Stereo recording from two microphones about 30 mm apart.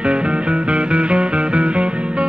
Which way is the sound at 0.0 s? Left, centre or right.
Right.